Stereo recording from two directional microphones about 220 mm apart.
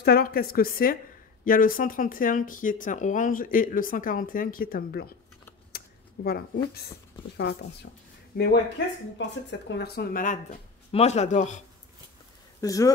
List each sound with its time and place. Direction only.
0.0 s speech: 45° left (ahead or behind)
6.2 s speech: 45° left (ahead or behind)
8.3 s speech: 45° left (ahead or behind)
12.5 s speech: 15° left (ahead or behind)